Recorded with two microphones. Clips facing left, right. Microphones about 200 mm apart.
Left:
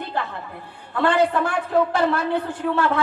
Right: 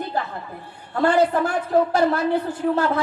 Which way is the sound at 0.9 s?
40° right (ahead or behind).